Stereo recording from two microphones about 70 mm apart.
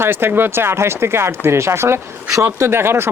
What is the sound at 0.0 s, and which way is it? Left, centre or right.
Speech, right.